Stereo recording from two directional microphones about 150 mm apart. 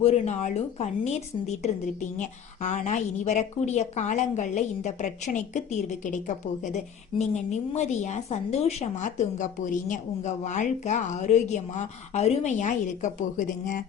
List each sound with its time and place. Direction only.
0.0 s a woman's voice: 45° left (ahead or behind); by 13.8 s 60° left (ahead or behind)